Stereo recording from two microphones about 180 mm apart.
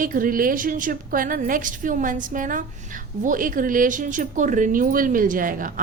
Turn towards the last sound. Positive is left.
turn(degrees=-50)  # may be behind; listen again after turning